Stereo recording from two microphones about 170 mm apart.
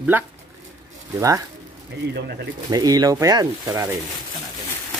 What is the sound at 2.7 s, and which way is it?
Speech, 20° right (ahead or behind).